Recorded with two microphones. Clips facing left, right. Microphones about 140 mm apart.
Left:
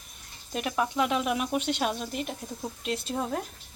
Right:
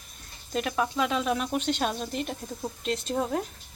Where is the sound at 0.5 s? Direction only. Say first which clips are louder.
Right 1 dB; 20° left (ahead or behind).